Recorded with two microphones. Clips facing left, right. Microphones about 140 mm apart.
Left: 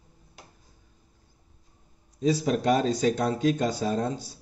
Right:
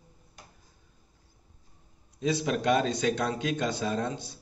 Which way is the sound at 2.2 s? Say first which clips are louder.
Left 4 dB; 40° left (ahead or behind).